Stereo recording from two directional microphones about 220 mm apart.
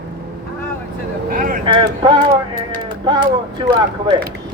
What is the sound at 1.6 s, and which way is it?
Speech, 20° right (ahead or behind).